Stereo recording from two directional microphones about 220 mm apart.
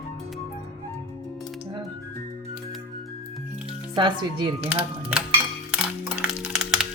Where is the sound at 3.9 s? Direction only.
20° right (ahead or behind).